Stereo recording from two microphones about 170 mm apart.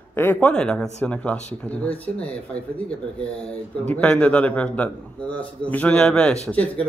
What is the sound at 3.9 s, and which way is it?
Speech, 10° left (ahead or behind).